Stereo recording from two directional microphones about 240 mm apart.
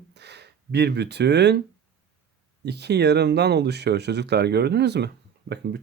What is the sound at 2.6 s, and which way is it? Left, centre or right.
Speech, right.